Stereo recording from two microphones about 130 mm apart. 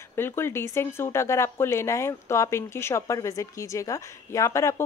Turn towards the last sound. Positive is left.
turn(degrees=20)  # may be behind; listen again after turning